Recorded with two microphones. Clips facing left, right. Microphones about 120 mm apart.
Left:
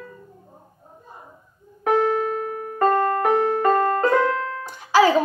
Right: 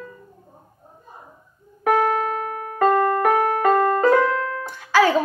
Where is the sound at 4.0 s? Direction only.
5° right (ahead or behind).